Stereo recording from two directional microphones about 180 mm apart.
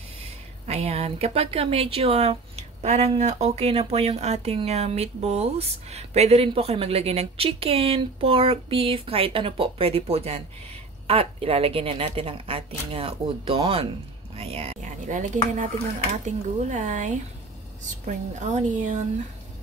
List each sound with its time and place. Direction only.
0.2 s speech: 35° right (ahead or behind)